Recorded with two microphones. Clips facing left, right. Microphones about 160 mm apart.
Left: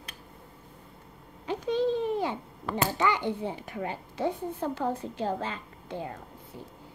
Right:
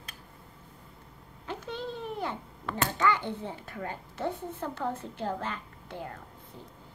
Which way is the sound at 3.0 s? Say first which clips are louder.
Right 2 dB; 15° left (ahead or behind).